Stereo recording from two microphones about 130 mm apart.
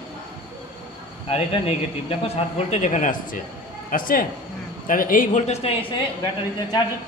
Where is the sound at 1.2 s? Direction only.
45° left (ahead or behind).